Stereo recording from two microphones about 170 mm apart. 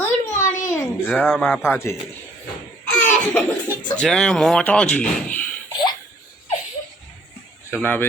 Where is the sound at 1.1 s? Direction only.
Centre (ahead or behind).